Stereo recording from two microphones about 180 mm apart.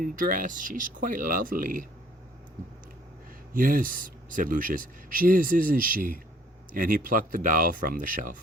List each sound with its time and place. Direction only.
0.0 s speech: 50° right (ahead or behind)
3.5 s speech: 50° right (ahead or behind)